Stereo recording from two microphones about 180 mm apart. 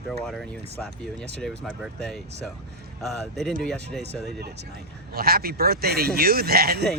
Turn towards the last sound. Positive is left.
turn(degrees=-60)  # may be behind; listen again after turning